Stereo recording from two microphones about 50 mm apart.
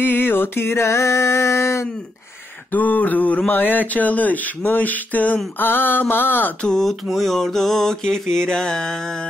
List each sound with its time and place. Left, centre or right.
0.0 s a sound: left
2.7 s speech: left
6.7 s mantra: centre